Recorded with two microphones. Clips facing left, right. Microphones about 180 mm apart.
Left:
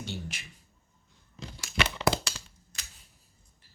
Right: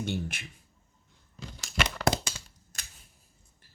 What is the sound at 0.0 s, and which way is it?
Speech, 55° right (ahead or behind).